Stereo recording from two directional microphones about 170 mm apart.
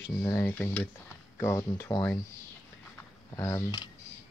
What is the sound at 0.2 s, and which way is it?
Speech, 10° left (ahead or behind).